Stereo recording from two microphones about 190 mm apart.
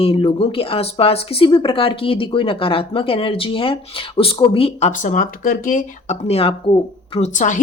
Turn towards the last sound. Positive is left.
turn(degrees=40)  # may be behind; listen again after turning